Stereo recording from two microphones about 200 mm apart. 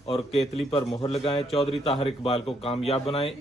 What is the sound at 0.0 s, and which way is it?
A man's voice, 30° left (ahead or behind).